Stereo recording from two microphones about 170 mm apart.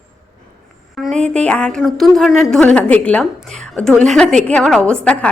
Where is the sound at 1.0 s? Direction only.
45° right (ahead or behind).